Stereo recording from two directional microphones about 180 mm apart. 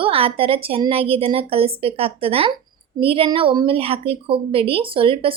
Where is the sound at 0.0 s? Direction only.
30° right (ahead or behind).